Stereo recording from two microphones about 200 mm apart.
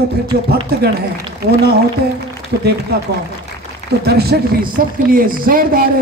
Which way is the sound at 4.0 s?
50° right (ahead or behind).